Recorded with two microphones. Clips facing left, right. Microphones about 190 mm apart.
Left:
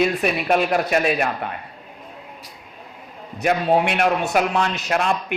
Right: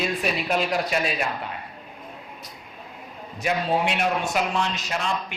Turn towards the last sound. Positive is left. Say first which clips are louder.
# left 6 dB
turn(degrees=60)  # may be behind; listen again after turning